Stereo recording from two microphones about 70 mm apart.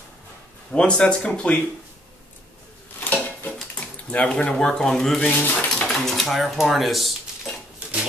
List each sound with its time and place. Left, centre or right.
0.7 s speech: centre
3.0 s a sound: left
3.8 s speech: centre